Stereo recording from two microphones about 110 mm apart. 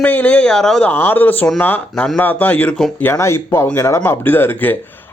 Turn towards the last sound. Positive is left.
turn(degrees=20)  # may be behind; listen again after turning